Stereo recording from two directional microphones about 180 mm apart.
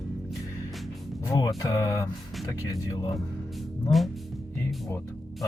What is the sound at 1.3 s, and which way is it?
Speech, 20° left (ahead or behind).